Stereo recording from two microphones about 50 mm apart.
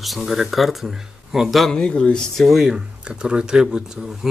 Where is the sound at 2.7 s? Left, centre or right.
Centre.